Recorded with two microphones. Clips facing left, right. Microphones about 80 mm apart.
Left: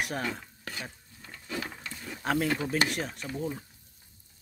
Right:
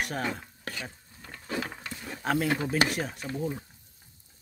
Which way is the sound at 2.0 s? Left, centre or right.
Centre.